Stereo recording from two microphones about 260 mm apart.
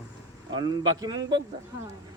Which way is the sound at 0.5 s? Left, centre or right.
Centre.